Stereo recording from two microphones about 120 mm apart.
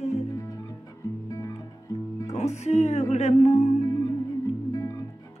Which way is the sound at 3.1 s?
70° left (ahead or behind).